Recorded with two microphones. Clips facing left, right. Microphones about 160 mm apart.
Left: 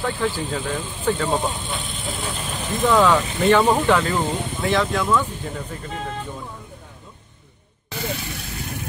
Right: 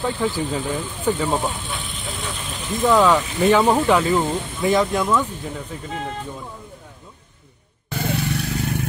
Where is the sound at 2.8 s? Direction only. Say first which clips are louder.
Right 1 dB; 10° right (ahead or behind).